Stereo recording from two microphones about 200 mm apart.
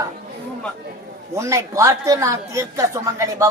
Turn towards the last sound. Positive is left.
turn(degrees=-15)  # may be behind; listen again after turning